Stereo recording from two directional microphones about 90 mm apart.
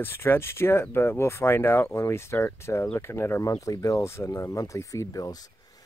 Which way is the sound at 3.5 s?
40° left (ahead or behind).